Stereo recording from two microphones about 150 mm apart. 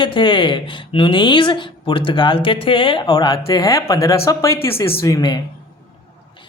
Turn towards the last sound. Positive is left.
turn(degrees=25)  # may be behind; listen again after turning